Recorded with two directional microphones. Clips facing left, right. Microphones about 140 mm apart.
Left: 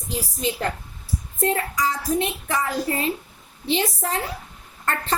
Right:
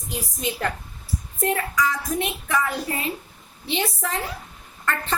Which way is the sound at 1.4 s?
30° left (ahead or behind).